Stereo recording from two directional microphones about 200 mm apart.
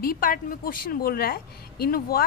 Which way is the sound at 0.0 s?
45° left (ahead or behind).